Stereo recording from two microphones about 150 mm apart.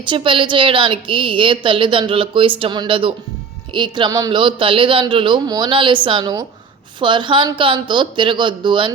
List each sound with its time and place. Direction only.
0.0 s a woman's voice: 35° right (ahead or behind)